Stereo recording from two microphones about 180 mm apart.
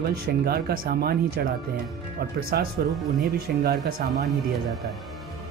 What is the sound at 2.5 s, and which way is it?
Speech, 60° right (ahead or behind).